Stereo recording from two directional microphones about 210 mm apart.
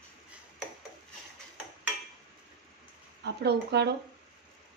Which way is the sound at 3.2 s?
50° right (ahead or behind).